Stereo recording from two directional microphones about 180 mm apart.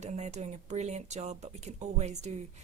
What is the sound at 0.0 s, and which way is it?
A woman's voice, 40° right (ahead or behind).